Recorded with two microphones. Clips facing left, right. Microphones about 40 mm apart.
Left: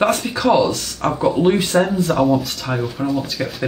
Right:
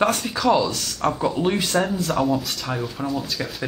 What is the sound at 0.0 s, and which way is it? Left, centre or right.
Speech, centre.